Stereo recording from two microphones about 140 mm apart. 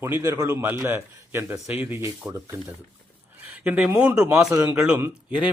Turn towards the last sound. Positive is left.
turn(degrees=-10)  # may be behind; listen again after turning